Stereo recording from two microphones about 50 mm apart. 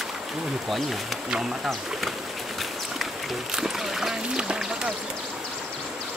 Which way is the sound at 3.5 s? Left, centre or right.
Centre.